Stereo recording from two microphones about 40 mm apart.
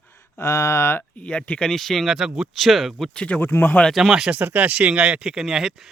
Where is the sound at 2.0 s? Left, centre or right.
Centre.